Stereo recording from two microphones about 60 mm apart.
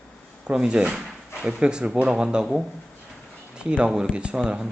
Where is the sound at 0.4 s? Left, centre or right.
Centre.